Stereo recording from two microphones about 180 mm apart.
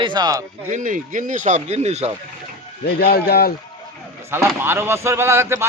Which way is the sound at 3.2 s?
60° left (ahead or behind).